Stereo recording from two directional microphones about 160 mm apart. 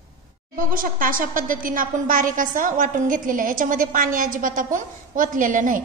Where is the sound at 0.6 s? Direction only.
60° right (ahead or behind).